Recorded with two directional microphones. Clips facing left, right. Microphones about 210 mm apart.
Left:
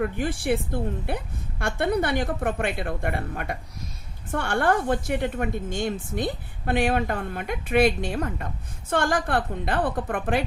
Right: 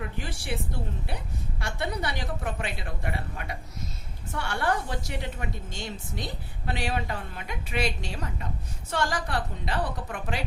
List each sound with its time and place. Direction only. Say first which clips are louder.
0.0 s a woman's voice: left 10 dB; 55° left (ahead or behind)